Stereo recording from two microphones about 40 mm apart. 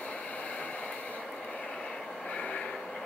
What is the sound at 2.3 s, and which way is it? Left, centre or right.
Vehicle, left.